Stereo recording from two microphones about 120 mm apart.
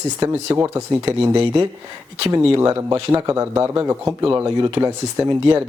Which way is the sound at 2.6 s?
25° right (ahead or behind).